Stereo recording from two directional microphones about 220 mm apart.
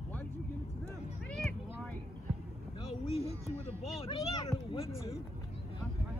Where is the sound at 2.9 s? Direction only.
25° left (ahead or behind).